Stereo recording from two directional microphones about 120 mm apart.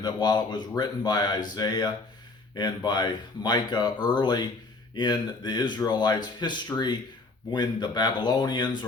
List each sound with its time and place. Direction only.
0.0 s speech: 35° left (ahead or behind)